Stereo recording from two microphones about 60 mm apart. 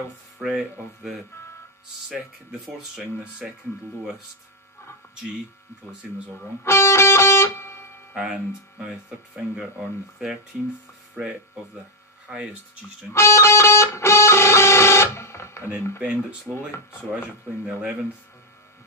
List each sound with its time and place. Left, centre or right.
0.4 s speech: centre
3.4 s speech: centre
5.9 s speech: right
6.6 s music: left
8.1 s speech: centre
13.1 s music: left
16.0 s speech: centre